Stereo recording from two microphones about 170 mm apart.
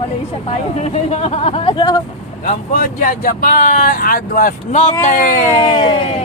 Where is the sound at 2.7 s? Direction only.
50° left (ahead or behind).